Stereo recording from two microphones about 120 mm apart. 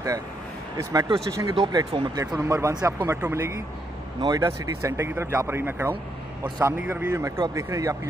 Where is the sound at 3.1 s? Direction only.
20° right (ahead or behind).